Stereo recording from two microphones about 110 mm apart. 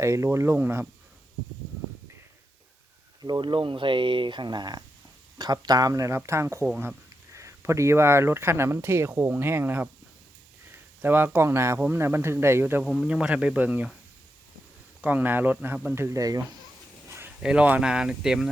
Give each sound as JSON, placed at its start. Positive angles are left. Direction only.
{"t": 0.0, "sound": "speech", "side_deg": -25}
{"t": 3.2, "sound": "speech", "side_deg": -40}
{"t": 12.8, "sound": "speech", "side_deg": 0}
{"t": 13.1, "sound": "speech", "side_deg": -10}
{"t": 15.0, "sound": "speech", "side_deg": -15}
{"t": 17.1, "sound": "a sound", "side_deg": -25}
{"t": 17.4, "sound": "speech", "side_deg": -10}